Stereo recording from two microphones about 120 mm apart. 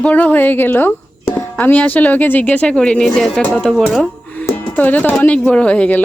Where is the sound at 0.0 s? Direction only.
10° left (ahead or behind).